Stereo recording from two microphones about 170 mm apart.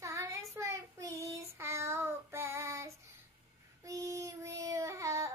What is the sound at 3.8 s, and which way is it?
Child singing, 20° right (ahead or behind).